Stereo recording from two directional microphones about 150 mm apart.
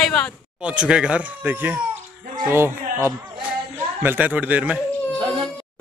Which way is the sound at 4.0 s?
10° right (ahead or behind).